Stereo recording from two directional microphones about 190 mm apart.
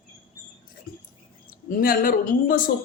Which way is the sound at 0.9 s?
50° left (ahead or behind).